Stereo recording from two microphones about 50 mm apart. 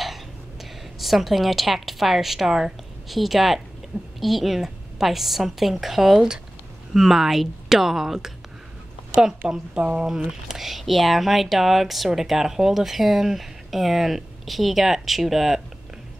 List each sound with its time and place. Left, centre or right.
0.9 s a woman's voice: centre
9.4 s a woman's voice: right
10.5 s speech: centre